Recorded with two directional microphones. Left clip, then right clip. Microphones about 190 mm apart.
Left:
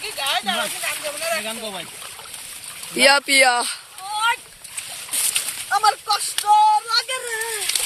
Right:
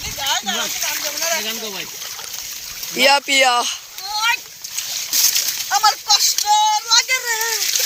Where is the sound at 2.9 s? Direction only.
10° left (ahead or behind).